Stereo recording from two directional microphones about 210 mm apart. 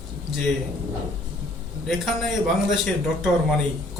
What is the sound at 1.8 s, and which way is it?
Speech, centre (ahead or behind).